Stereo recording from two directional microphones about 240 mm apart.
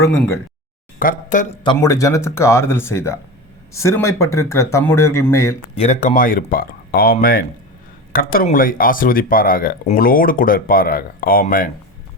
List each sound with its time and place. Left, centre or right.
0.0 s speech: centre
0.9 s speech: left
1.6 s speech: centre
5.7 s speech: left